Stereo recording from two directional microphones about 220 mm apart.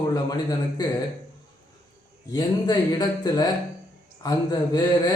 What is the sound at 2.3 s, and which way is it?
A man's voice, 20° left (ahead or behind).